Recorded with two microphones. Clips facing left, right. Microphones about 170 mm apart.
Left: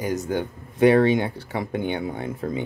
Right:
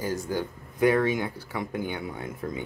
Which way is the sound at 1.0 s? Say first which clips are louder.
Left 6 dB; 30° left (ahead or behind).